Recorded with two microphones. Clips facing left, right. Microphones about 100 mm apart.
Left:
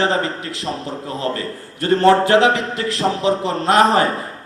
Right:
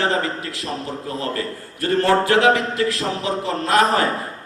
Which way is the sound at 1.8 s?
25° left (ahead or behind).